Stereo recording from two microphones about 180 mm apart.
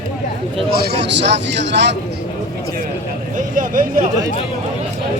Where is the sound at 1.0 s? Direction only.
80° right.